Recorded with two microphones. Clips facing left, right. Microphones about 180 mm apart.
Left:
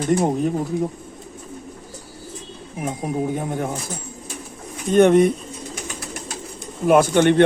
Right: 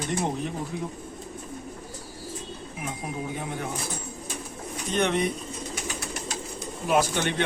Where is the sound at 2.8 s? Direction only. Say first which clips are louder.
Left 10 dB; 45° left (ahead or behind).